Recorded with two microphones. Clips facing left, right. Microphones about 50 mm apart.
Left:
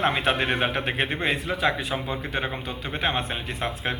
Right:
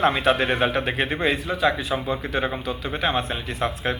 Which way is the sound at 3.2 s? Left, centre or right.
Centre.